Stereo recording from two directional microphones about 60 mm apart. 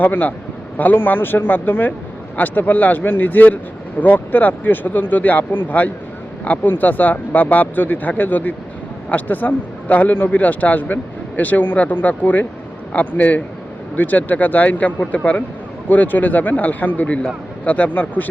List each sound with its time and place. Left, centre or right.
0.0 s speech: left